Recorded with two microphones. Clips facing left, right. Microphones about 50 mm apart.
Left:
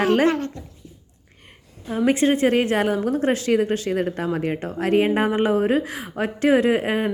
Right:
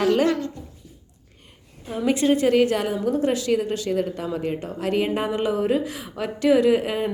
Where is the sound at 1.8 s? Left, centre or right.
Left.